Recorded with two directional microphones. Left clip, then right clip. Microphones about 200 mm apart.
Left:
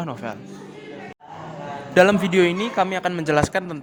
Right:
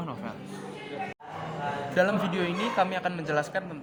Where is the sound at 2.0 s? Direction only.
35° left (ahead or behind).